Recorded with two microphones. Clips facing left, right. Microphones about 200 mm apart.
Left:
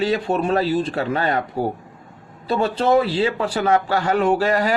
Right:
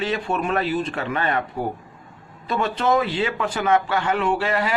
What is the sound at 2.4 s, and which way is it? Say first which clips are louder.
A man's voice: left 3 dB; 30° left (ahead or behind).